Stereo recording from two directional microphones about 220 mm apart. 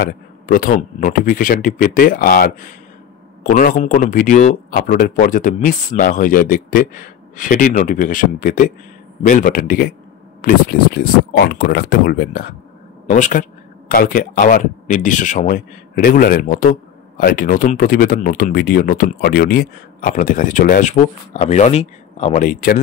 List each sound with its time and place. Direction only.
0.0 s speech: 40° left (ahead or behind)